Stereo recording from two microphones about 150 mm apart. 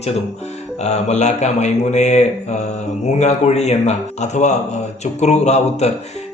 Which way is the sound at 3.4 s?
45° left (ahead or behind).